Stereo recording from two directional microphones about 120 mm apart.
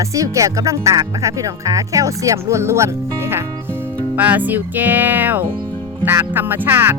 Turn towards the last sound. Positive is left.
turn(degrees=-15)  # may be behind; listen again after turning